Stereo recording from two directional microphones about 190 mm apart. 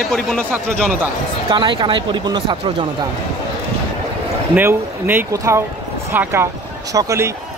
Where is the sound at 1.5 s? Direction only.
25° right (ahead or behind).